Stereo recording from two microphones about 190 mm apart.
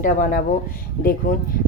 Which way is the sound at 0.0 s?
45° left (ahead or behind).